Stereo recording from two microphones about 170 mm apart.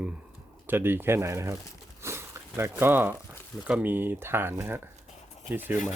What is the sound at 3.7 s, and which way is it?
Speech, 10° right (ahead or behind).